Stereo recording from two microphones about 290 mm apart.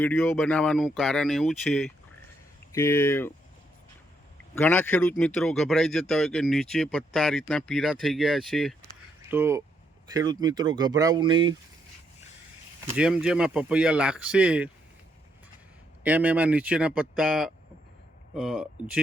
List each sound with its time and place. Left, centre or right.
0.0 s speech: centre
4.5 s speech: centre
12.9 s speech: centre
16.0 s speech: centre